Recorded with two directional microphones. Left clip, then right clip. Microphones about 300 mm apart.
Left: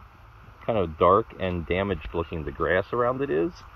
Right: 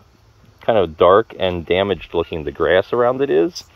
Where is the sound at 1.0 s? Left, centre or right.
Right.